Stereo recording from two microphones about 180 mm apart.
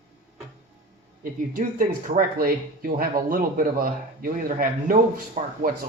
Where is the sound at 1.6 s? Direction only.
45° right (ahead or behind).